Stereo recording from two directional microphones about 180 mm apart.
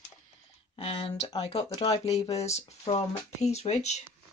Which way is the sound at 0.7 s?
30° left (ahead or behind).